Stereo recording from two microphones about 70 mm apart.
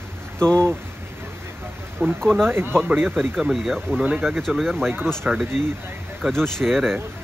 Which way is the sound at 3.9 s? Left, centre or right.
Centre.